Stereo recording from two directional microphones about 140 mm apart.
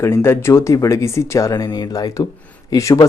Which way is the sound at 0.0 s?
20° left (ahead or behind).